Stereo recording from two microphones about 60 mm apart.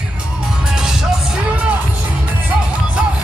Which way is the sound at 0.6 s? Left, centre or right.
Centre.